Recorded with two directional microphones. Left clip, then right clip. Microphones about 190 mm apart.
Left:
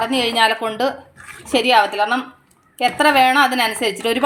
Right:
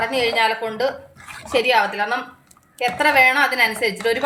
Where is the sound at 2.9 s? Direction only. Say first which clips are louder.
Left 1 dB; 35° left (ahead or behind).